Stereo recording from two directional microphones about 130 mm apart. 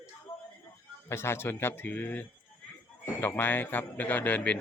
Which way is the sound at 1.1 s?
20° left (ahead or behind).